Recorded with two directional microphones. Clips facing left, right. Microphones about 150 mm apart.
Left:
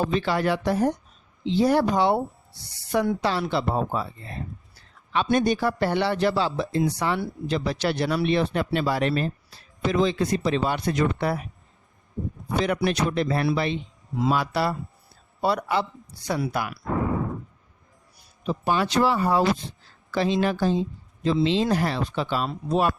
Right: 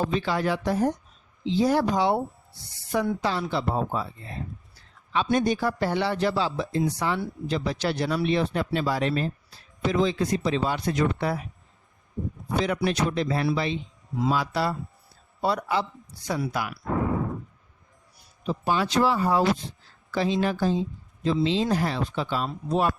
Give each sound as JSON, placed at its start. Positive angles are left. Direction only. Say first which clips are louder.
{"t": 0.1, "sound": "a man's voice", "louder": "left 2 dB", "side_deg": 65}
{"t": 12.6, "sound": "speech", "louder": "left 2 dB", "side_deg": 65}
{"t": 18.4, "sound": "a man's voice", "louder": "left 1 dB", "side_deg": 60}